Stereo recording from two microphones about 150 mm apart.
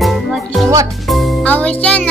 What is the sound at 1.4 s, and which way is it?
Music, 10° left (ahead or behind).